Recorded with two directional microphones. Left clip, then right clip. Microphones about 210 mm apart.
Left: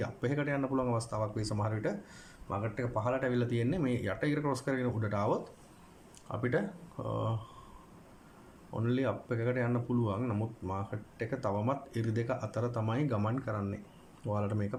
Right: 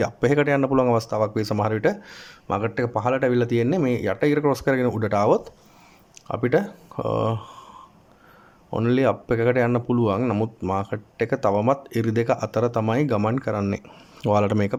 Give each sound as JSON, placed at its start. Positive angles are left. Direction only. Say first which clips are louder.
{"t": 0.0, "sound": "speech", "louder": "right 15 dB", "side_deg": -35}
{"t": 8.7, "sound": "speech", "louder": "right 13 dB", "side_deg": -35}